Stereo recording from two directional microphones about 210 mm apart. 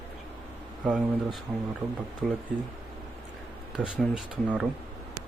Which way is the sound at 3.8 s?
5° right (ahead or behind).